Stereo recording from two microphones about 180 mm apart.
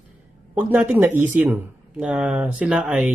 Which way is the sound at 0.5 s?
10° right (ahead or behind).